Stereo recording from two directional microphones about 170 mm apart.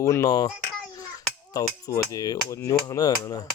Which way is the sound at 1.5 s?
20° left (ahead or behind).